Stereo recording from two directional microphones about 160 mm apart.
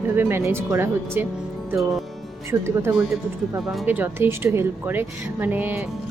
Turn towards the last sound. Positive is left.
turn(degrees=-10)  # may be behind; listen again after turning